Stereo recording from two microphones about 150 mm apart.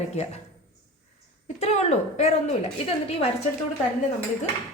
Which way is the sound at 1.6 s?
45° left (ahead or behind).